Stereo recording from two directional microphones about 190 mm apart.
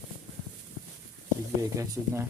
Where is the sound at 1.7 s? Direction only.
15° right (ahead or behind).